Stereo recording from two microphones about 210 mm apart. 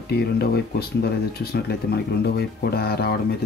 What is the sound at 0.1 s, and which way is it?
Speech, 50° left (ahead or behind).